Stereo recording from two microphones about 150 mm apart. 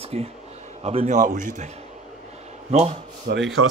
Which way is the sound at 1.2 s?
60° right (ahead or behind).